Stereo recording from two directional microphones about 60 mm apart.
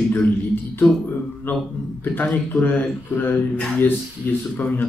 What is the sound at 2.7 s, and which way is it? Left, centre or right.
Speech, left.